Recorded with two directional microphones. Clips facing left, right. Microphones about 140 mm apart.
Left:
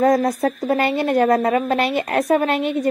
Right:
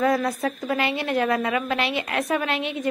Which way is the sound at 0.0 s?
40° left (ahead or behind).